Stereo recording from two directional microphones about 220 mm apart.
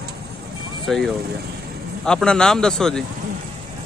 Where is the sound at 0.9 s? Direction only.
Centre (ahead or behind).